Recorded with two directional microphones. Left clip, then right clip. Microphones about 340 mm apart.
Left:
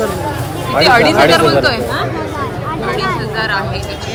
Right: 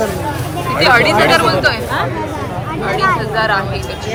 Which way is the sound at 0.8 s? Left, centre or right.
Centre.